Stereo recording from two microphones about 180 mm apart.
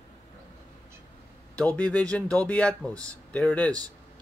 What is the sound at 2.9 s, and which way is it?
Speech, 20° right (ahead or behind).